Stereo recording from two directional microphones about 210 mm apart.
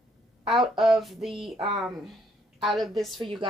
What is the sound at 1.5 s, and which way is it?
Speech, 25° right (ahead or behind).